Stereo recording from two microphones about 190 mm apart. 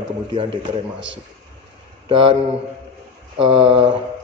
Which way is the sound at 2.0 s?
25° right (ahead or behind).